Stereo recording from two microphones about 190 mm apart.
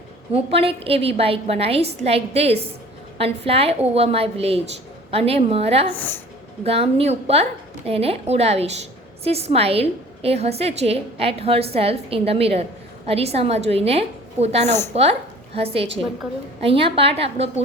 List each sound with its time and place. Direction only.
0.3 s a woman's voice: 30° right (ahead or behind)
5.9 s a woman's voice: 10° left (ahead or behind)
6.7 s a woman's voice: 30° right (ahead or behind)